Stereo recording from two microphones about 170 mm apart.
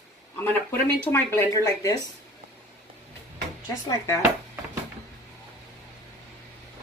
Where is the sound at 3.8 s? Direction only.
20° left (ahead or behind).